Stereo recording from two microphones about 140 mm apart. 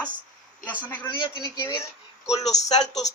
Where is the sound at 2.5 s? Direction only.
55° left (ahead or behind).